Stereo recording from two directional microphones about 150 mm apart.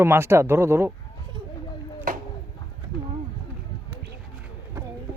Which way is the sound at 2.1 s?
65° right (ahead or behind).